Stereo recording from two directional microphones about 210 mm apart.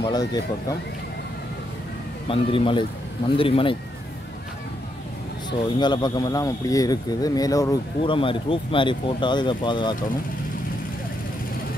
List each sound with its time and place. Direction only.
0.0 s speech: 20° left (ahead or behind)
2.2 s speech: 25° left (ahead or behind)
5.8 s speech: 20° left (ahead or behind)